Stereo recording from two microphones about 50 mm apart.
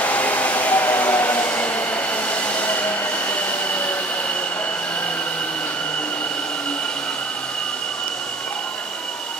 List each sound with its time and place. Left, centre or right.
0.0 s train: left